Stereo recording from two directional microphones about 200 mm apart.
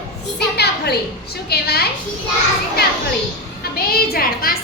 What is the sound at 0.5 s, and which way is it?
A woman's voice, 55° left (ahead or behind).